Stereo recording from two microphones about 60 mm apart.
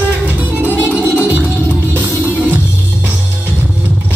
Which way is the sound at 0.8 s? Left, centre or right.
Right.